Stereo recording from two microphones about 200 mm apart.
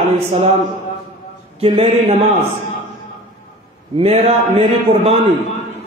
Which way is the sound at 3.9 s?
30° right (ahead or behind).